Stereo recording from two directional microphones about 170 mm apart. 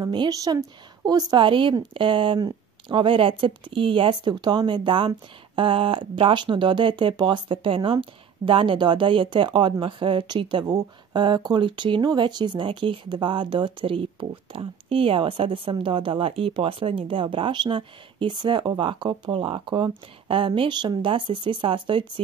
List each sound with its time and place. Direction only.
0.0 s speech: 25° right (ahead or behind)